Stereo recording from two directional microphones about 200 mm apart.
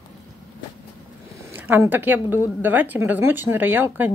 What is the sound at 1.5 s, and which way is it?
A woman's voice, 10° right (ahead or behind).